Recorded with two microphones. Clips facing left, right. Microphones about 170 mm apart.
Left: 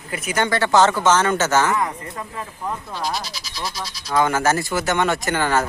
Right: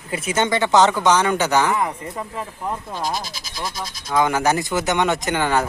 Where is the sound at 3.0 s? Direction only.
50° right (ahead or behind).